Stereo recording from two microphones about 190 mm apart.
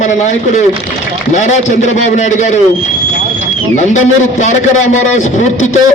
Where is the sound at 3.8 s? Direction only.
40° left (ahead or behind).